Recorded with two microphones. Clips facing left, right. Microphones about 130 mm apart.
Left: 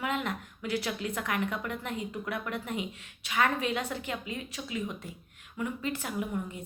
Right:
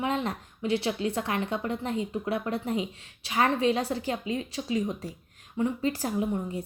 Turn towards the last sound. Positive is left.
turn(degrees=-35)  # may be behind; listen again after turning